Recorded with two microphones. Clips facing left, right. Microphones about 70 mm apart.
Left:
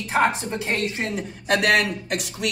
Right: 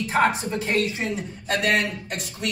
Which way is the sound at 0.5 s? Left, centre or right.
Left.